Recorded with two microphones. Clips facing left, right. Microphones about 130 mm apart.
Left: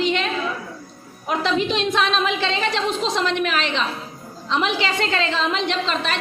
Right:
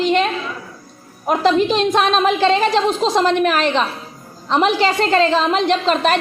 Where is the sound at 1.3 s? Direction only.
45° right (ahead or behind).